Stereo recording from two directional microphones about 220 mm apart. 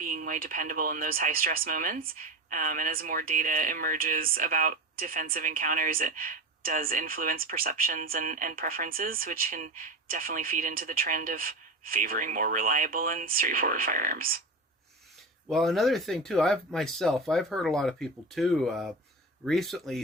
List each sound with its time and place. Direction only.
0.0 s speech: 40° right (ahead or behind)
15.4 s speech: centre (ahead or behind)